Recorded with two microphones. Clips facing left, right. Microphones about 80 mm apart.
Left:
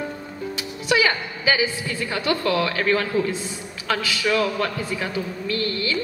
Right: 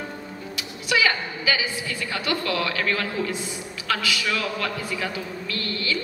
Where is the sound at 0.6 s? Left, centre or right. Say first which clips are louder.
Left 3 dB; left.